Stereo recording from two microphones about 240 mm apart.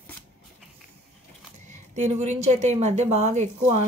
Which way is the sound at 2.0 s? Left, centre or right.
Right.